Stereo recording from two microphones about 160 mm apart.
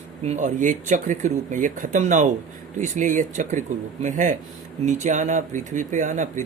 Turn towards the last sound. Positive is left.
turn(degrees=-50)  # may be behind; listen again after turning